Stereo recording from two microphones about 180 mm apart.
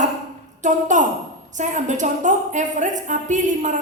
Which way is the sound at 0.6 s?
45° right (ahead or behind).